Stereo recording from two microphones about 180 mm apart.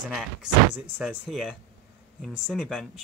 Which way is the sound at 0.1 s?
5° right (ahead or behind).